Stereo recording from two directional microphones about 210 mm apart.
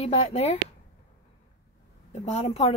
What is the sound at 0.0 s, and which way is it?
Speech, 30° left (ahead or behind).